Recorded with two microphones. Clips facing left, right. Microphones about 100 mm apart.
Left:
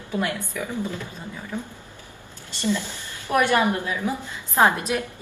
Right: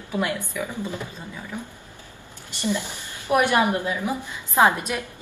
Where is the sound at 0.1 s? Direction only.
15° right (ahead or behind).